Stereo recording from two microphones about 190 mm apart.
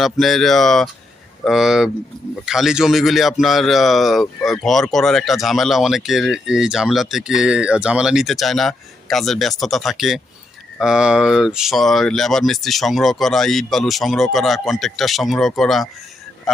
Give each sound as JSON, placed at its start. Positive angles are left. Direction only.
{"t": 0.0, "sound": "speech", "side_deg": 0}